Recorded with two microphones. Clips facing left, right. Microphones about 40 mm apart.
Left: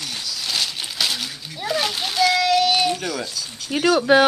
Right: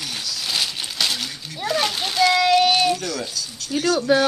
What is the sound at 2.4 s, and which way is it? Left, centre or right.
Speech, centre.